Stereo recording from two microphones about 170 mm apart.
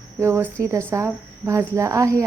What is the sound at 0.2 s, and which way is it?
A woman's voice, 15° right (ahead or behind).